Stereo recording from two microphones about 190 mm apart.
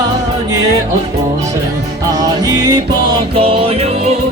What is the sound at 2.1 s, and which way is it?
Music, 20° right (ahead or behind).